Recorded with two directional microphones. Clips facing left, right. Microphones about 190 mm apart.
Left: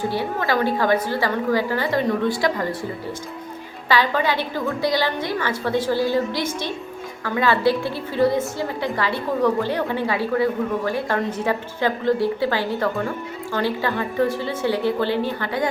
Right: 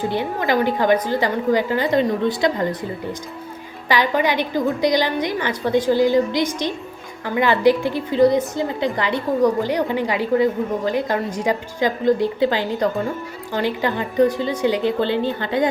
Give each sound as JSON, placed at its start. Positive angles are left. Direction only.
{"t": 0.1, "sound": "a woman's voice", "side_deg": -20}
{"t": 3.8, "sound": "a woman's voice", "side_deg": -15}